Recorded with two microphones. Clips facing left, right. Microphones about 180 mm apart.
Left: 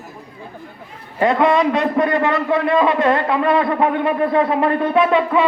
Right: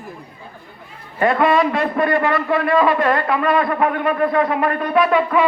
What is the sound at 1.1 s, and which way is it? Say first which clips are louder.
A man's voice: left 1 dB; 20° left (ahead or behind).